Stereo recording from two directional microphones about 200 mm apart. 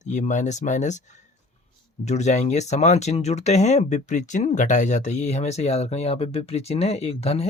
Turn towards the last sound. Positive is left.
turn(degrees=30)  # may be behind; listen again after turning